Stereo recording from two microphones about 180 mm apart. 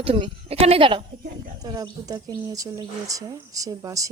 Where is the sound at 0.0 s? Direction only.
30° right (ahead or behind).